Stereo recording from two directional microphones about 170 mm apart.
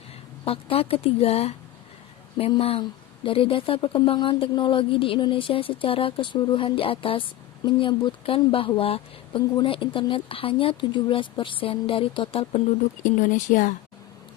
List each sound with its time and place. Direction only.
0.4 s speech: 35° left (ahead or behind)
13.0 s speech: 50° left (ahead or behind)